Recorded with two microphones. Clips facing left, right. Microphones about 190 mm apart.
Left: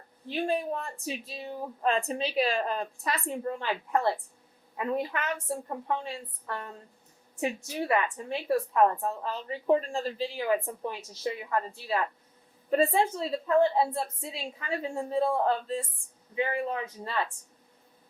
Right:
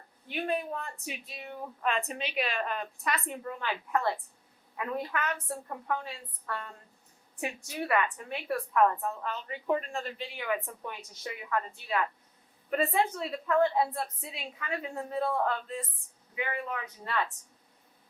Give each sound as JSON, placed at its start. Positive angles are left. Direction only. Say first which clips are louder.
{"t": 0.3, "sound": "a woman's voice", "louder": "left 3 dB", "side_deg": 30}